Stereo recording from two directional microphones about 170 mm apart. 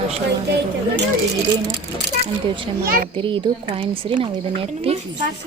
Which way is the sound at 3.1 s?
30° right (ahead or behind).